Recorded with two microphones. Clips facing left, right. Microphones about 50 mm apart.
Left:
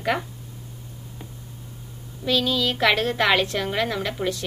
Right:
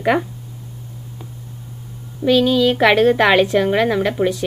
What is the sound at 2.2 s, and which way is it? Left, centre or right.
A woman's voice, right.